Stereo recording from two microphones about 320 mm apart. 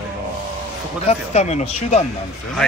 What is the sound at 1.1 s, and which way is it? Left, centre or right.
Speech, left.